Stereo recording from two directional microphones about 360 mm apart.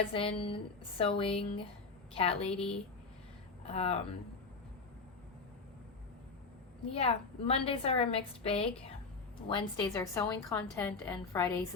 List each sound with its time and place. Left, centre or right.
0.1 s a woman's voice: centre
3.6 s speech: centre
6.9 s a woman's voice: centre